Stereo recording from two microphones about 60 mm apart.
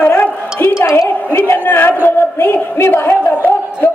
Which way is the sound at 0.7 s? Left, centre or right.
Left.